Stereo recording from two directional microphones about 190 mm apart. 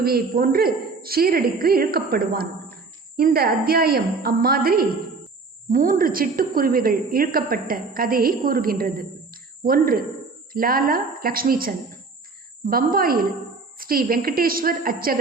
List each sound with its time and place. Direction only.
0.0 s a woman's voice: 50° right (ahead or behind)